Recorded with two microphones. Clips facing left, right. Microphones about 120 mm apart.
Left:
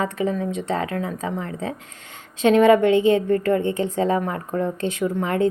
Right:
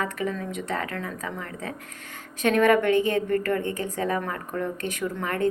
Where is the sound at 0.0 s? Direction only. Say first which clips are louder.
Left 5 dB; 20° left (ahead or behind).